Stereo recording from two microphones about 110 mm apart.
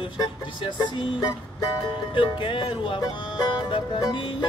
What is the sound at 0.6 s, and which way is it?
Music, 45° left (ahead or behind).